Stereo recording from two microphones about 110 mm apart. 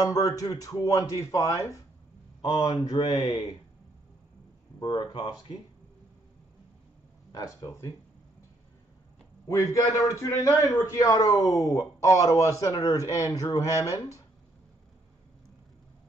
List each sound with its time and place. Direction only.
0.0 s speech: 30° left (ahead or behind)
2.4 s speech: 45° left (ahead or behind)
4.7 s speech: 45° left (ahead or behind)
7.3 s speech: 30° left (ahead or behind)
9.5 s a man's voice: 30° left (ahead or behind)